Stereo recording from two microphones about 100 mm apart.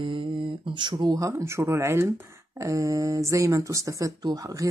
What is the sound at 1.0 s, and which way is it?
Speech, 35° right (ahead or behind).